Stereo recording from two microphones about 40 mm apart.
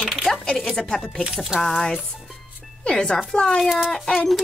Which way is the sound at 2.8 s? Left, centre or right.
Left.